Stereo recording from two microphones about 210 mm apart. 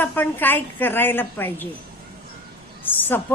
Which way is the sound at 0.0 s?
10° left (ahead or behind).